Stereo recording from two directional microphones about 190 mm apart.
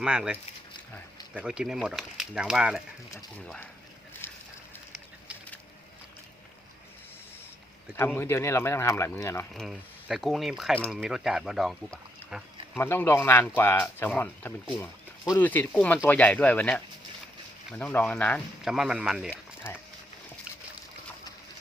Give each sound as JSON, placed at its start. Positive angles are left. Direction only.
{"t": 0.0, "sound": "speech", "side_deg": -5}
{"t": 3.3, "sound": "speech", "side_deg": 5}
{"t": 4.1, "sound": "a sound", "side_deg": 10}
{"t": 7.9, "sound": "speech", "side_deg": 10}
{"t": 9.5, "sound": "speech", "side_deg": 0}